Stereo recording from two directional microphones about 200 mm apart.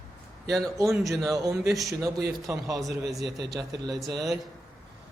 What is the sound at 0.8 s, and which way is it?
A woman's voice, 15° right (ahead or behind).